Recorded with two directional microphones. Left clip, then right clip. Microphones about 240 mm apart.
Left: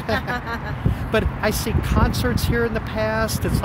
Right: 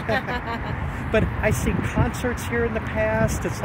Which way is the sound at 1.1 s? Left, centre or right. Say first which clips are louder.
Left 1 dB; centre.